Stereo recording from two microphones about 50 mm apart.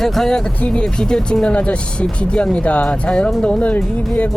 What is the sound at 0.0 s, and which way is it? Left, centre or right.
Speech, centre.